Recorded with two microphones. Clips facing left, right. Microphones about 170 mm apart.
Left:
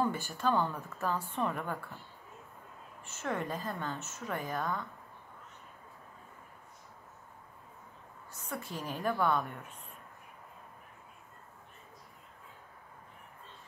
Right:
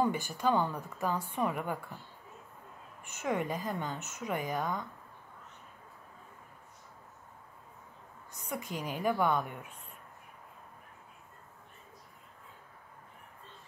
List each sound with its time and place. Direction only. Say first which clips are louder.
0.0 s a sound: right 2 dB; 15° right (ahead or behind)
0.4 s a woman's voice: right 1 dB; 15° right (ahead or behind)
3.0 s a woman's voice: right 3 dB; 15° right (ahead or behind)
8.3 s a woman's voice: right 2 dB; 15° right (ahead or behind)